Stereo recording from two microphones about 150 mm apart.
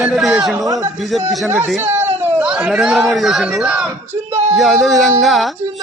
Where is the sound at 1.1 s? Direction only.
Centre (ahead or behind).